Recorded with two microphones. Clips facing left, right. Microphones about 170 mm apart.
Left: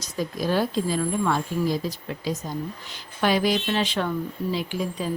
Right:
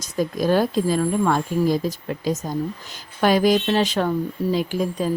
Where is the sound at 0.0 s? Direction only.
50° right (ahead or behind).